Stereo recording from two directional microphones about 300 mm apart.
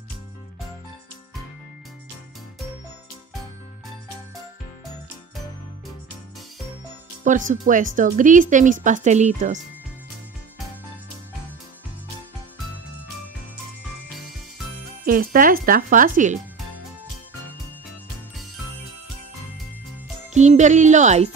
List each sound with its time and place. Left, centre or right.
7.2 s speech: right
15.0 s speech: right
20.3 s speech: right